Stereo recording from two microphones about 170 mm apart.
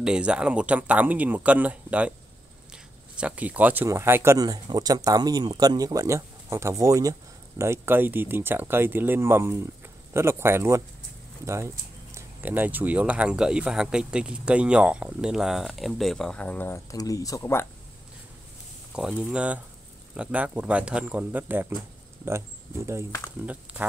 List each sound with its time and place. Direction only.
0.0 s speech: 5° right (ahead or behind); by 17.6 s 15° left (ahead or behind)
18.9 s speech: 5° right (ahead or behind)
23.4 s speech: 10° right (ahead or behind)